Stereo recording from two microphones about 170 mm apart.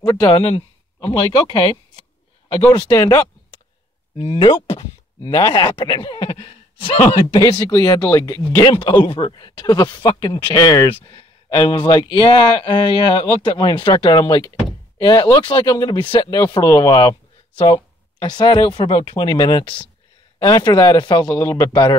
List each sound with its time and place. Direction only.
0.0 s a man's voice: 20° left (ahead or behind)
2.7 s speech: 20° left (ahead or behind)
4.2 s speech: 30° left (ahead or behind)